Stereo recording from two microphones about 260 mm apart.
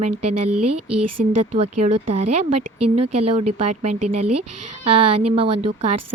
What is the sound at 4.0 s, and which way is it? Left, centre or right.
Speech, right.